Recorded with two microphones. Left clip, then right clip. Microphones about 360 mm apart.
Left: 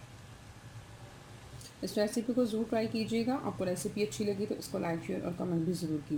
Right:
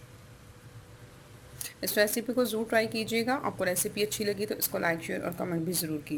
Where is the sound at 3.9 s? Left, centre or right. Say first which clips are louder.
Right 4 dB; right.